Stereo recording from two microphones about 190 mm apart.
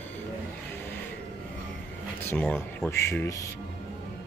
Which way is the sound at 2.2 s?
10° left (ahead or behind).